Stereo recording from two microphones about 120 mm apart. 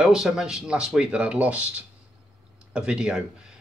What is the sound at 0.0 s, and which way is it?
Speech, 5° right (ahead or behind).